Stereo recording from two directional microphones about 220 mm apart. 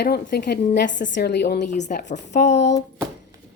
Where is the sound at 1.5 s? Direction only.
35° left (ahead or behind).